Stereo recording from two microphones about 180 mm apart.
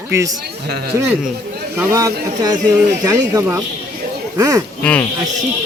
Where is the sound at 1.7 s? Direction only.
20° right (ahead or behind).